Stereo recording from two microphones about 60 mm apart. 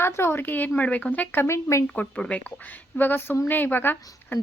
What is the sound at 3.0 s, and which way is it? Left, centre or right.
Speech, left.